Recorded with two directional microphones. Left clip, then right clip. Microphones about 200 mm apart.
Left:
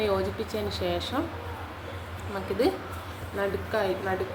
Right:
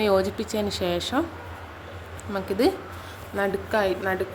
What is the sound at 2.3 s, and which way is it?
A woman's voice, 55° right (ahead or behind).